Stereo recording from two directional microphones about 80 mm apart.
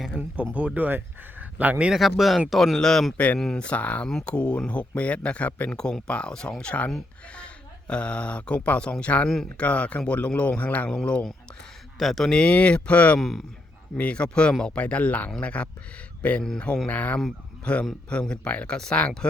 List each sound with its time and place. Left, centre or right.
0.2 s speech: right
2.0 s speech: centre
11.9 s speech: centre
13.1 s speech: centre
13.9 s speech: centre